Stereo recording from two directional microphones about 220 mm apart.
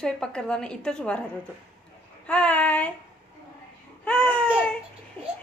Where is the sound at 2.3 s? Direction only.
5° left (ahead or behind).